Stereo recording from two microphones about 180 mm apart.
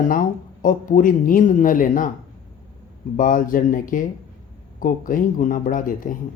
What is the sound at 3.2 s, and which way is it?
Speech, 50° left (ahead or behind).